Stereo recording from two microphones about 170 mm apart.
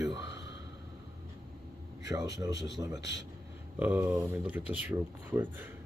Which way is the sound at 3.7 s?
10° right (ahead or behind).